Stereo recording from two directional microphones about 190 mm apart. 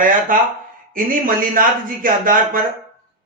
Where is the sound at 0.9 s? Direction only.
45° right (ahead or behind).